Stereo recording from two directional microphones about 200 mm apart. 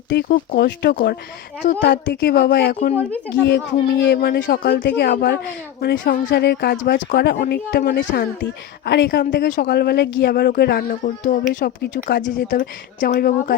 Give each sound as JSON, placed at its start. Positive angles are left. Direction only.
{"t": 0.1, "sound": "speech", "side_deg": 55}